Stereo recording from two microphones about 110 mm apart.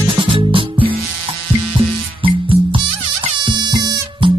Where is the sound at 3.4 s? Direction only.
40° right (ahead or behind).